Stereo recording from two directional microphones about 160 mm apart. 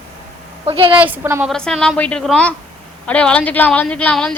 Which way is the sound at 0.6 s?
30° right (ahead or behind).